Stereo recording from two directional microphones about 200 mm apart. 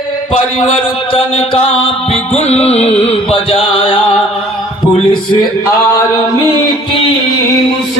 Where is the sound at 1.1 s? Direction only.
30° left (ahead or behind).